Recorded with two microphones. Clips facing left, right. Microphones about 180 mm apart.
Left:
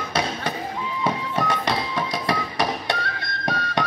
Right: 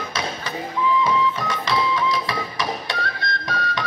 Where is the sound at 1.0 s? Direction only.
65° left (ahead or behind).